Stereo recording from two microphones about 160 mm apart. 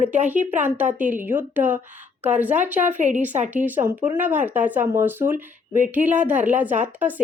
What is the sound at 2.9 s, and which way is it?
Speech, 50° right (ahead or behind).